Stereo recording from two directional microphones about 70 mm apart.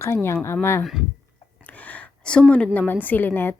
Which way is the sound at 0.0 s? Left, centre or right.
Left.